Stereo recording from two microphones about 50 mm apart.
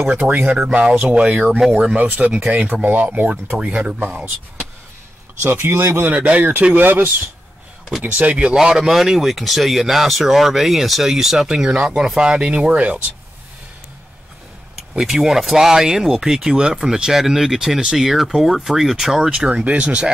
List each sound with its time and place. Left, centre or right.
0.1 s speech: right
1.1 s speech: centre
2.0 s speech: right
3.5 s speech: right
5.4 s speech: right
6.1 s speech: right
6.7 s speech: right
8.0 s speech: right
8.5 s speech: centre; by 13.0 s right
15.0 s speech: centre